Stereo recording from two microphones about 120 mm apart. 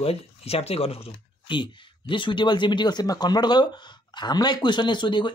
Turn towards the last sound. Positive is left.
turn(degrees=40)  # may be behind; listen again after turning